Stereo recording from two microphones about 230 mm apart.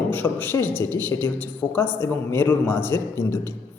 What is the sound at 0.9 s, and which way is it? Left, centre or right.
A man's voice, centre.